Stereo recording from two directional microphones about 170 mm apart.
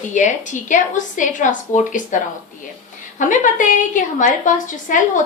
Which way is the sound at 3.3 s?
50° left (ahead or behind).